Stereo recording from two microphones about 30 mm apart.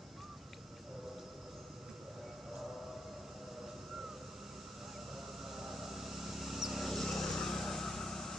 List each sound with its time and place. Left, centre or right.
5.4 s vehicle: centre
6.9 s vehicle: centre